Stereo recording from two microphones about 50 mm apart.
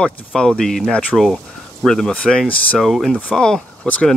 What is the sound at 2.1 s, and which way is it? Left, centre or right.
Speech, centre.